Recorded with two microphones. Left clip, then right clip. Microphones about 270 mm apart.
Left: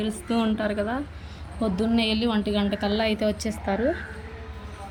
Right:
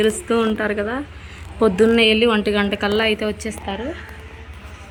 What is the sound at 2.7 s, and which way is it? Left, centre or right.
Speech, centre.